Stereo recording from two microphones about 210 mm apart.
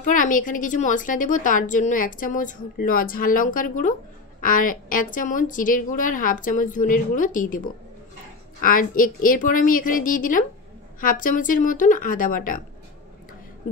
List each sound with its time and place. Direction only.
0.0 s a woman's voice: 40° left (ahead or behind)